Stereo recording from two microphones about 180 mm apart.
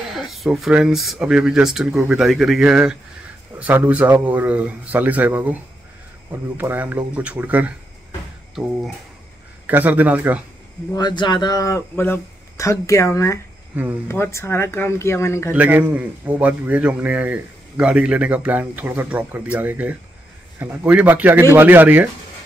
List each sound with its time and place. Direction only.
0.1 s a man's voice: centre (ahead or behind)
9.7 s a man's voice: 10° right (ahead or behind)
10.9 s speech: 25° left (ahead or behind)
15.5 s a man's voice: 10° right (ahead or behind)